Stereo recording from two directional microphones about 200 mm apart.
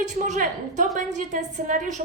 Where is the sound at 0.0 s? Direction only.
40° right (ahead or behind).